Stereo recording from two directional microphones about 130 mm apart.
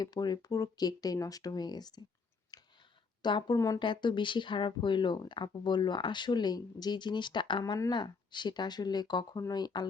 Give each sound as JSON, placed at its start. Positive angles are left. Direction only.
{"t": 0.0, "sound": "speech", "side_deg": 30}
{"t": 2.5, "sound": "a sound", "side_deg": 30}
{"t": 3.2, "sound": "speech", "side_deg": 35}